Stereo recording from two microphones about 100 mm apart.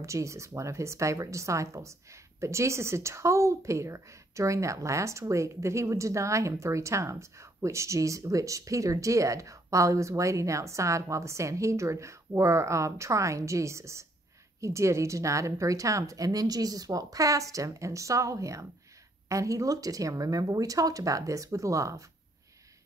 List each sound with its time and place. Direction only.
0.0 s a woman's voice: 30° right (ahead or behind)